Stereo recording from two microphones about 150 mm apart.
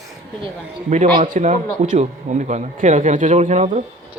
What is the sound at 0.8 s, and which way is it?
A man's voice, 55° right (ahead or behind).